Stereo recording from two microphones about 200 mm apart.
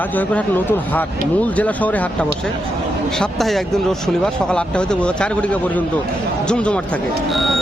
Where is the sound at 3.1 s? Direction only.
Centre (ahead or behind).